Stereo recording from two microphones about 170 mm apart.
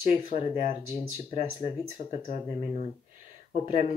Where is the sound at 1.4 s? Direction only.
35° left (ahead or behind).